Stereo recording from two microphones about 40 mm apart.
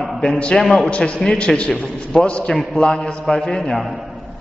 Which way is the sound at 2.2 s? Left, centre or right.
Left.